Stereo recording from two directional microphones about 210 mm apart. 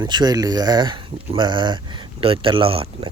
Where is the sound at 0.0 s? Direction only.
20° right (ahead or behind).